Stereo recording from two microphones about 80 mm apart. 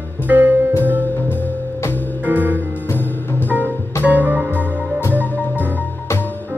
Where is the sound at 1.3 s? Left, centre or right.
Left.